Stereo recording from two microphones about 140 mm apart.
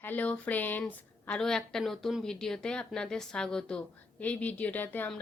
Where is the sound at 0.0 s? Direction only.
10° left (ahead or behind).